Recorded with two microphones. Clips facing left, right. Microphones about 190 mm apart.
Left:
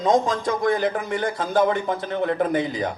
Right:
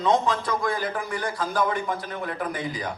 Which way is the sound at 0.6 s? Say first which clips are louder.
Left 6 dB; 20° left (ahead or behind).